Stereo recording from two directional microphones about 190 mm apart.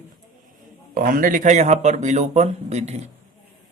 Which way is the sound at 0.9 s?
45° right (ahead or behind).